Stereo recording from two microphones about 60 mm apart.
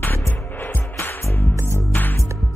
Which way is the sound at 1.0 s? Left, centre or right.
Left.